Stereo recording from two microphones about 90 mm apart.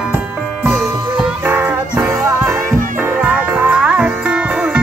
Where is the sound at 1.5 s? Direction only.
20° right (ahead or behind).